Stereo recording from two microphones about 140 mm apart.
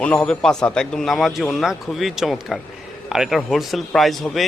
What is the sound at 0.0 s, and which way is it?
A man's voice, 10° left (ahead or behind).